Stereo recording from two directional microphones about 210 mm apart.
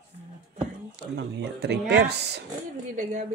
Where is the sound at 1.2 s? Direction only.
55° right (ahead or behind).